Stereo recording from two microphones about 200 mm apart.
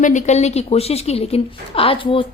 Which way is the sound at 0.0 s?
35° left (ahead or behind).